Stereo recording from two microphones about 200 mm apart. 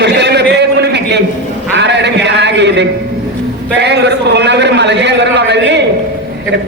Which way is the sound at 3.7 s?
55° right (ahead or behind).